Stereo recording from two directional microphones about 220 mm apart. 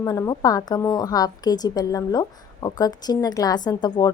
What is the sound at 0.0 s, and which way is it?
A woman's voice, 15° left (ahead or behind).